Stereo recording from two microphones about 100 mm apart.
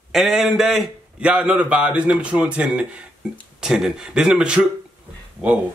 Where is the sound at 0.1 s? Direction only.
5° right (ahead or behind).